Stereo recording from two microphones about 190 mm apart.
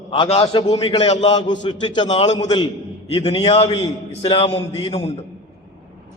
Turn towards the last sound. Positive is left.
turn(degrees=30)  # may be behind; listen again after turning